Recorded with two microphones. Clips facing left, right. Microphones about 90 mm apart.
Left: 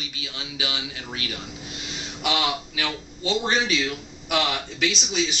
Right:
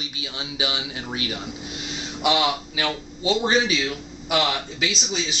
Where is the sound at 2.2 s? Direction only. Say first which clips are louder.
Right 4 dB; 10° right (ahead or behind).